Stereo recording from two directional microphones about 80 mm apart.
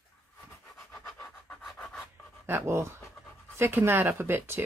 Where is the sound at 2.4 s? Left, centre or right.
Right.